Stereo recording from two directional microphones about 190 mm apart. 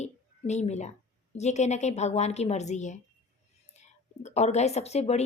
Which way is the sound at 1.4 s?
35° left (ahead or behind).